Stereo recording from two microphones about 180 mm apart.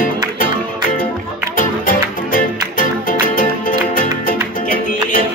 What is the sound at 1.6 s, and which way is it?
Music, 50° left (ahead or behind).